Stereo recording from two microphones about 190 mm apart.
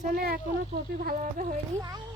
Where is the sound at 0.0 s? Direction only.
50° right (ahead or behind).